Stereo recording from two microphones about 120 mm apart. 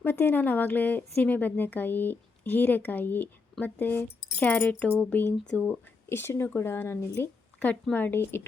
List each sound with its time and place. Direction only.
0.0 s speech: 15° left (ahead or behind)